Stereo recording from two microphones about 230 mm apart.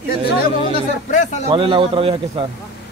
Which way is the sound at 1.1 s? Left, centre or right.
Left.